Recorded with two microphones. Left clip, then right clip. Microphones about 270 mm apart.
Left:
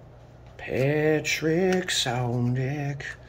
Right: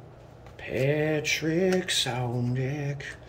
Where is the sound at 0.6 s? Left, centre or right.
Centre.